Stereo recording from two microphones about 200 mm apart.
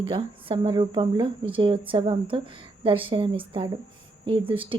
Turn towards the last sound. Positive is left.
turn(degrees=-25)  # may be behind; listen again after turning